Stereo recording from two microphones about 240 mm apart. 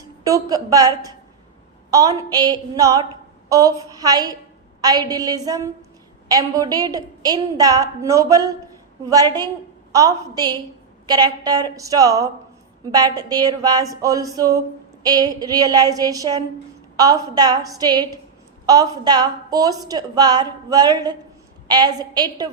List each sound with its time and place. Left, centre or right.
0.3 s a woman's voice: centre